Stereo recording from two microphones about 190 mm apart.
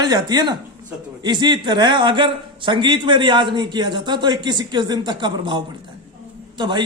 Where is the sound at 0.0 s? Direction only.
20° right (ahead or behind).